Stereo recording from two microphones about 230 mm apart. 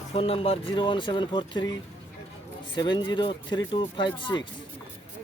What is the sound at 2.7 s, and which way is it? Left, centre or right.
Speech, centre.